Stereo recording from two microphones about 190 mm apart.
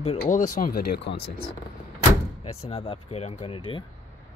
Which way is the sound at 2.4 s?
30° left (ahead or behind).